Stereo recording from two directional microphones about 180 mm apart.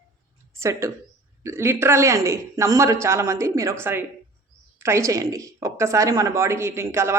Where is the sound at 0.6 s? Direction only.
15° right (ahead or behind).